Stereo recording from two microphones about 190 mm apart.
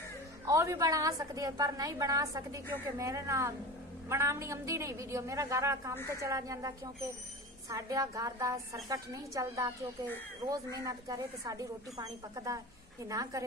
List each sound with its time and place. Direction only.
0.5 s speech: 15° right (ahead or behind)